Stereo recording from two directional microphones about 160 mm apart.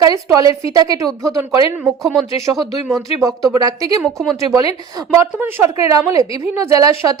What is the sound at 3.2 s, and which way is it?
Speech, 20° right (ahead or behind).